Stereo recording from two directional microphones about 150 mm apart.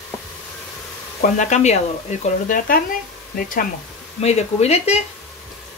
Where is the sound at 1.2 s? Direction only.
55° left (ahead or behind).